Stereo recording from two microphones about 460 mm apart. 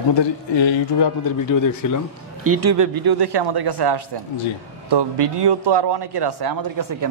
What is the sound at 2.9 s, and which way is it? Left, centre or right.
Speech, right.